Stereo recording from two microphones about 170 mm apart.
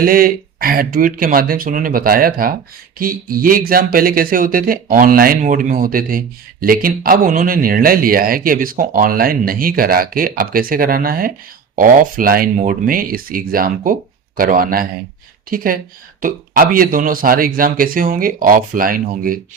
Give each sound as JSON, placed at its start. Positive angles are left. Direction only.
{"t": 0.0, "sound": "speech", "side_deg": -60}